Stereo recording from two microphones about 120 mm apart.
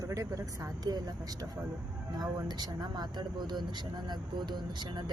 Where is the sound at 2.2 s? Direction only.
35° right (ahead or behind).